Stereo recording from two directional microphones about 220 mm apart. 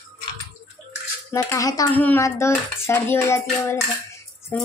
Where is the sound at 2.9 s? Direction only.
10° left (ahead or behind).